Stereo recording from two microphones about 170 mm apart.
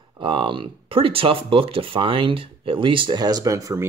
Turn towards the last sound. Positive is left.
turn(degrees=-20)  # may be behind; listen again after turning